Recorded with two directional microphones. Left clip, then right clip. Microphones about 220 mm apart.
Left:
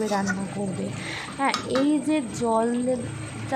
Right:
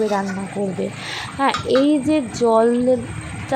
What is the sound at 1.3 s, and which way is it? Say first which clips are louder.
A woman's voice: right 7 dB; 25° right (ahead or behind).